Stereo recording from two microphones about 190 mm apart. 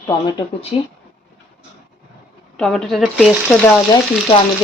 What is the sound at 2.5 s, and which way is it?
Speech, 5° left (ahead or behind).